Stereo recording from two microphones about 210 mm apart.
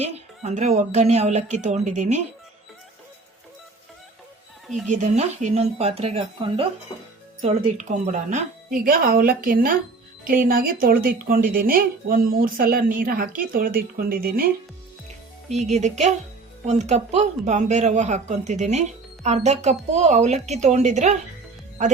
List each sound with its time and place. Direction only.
0.0 s speech: 30° right (ahead or behind)
4.9 s speech: 35° right (ahead or behind)
15.4 s speech: 30° right (ahead or behind)